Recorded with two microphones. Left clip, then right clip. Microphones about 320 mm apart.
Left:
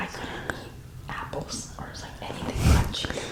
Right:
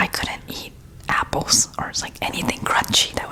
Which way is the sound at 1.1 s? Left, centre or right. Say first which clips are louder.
Right 14 dB; right.